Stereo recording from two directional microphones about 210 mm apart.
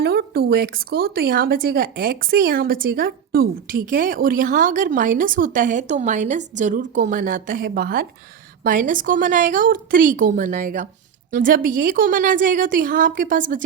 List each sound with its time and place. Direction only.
0.0 s speech: 50° right (ahead or behind)